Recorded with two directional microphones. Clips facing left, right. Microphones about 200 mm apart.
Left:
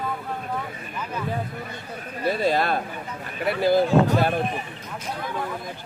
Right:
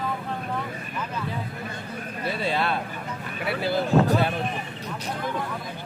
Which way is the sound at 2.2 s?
40° left (ahead or behind).